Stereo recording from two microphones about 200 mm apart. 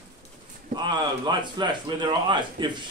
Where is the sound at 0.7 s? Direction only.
20° right (ahead or behind).